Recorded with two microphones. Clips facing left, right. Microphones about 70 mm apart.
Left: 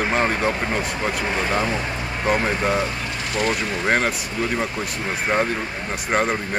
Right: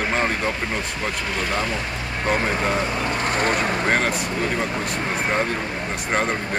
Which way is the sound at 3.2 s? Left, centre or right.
Right.